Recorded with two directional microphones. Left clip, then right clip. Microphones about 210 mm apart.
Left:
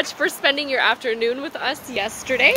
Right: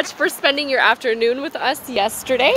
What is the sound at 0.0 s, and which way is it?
Speech, 35° right (ahead or behind).